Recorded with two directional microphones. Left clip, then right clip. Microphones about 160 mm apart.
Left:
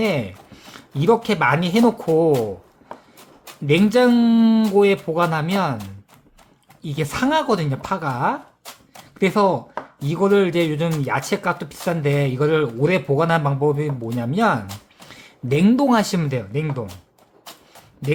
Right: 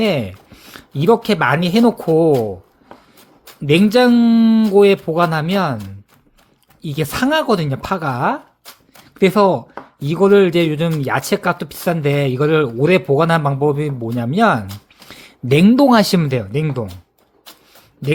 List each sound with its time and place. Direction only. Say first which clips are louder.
0.0 s speech: right 4 dB; 40° right (ahead or behind)
0.5 s speech: right 3 dB; 30° right (ahead or behind)
3.7 s speech: right 3 dB; 35° right (ahead or behind)
4.8 s speech: right 5 dB; 35° right (ahead or behind)
6.8 s speech: right 3 dB; 35° right (ahead or behind)
15.1 s a sound: right 6 dB; 40° right (ahead or behind)
15.7 s speech: right 6 dB; 35° right (ahead or behind)